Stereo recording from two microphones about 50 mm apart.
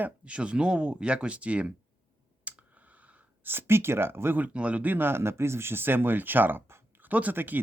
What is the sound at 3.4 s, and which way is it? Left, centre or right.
Speech, right.